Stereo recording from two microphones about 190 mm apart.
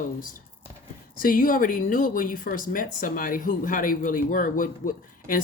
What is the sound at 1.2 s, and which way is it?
Speech, 45° left (ahead or behind).